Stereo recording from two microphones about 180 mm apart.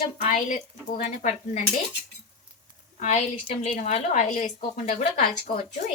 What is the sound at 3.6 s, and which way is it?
Speech, 40° left (ahead or behind).